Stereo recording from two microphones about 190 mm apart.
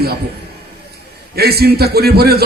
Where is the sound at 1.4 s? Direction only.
55° right (ahead or behind).